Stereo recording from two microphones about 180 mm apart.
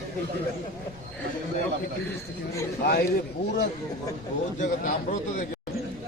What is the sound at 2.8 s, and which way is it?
Speech, 65° left (ahead or behind).